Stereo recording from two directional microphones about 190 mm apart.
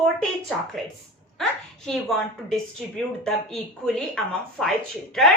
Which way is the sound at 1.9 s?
Centre (ahead or behind).